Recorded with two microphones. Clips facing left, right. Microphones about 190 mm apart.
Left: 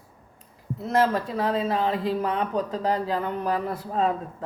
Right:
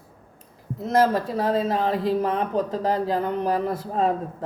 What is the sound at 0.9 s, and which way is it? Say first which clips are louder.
Speech: right 2 dB; 40° right (ahead or behind).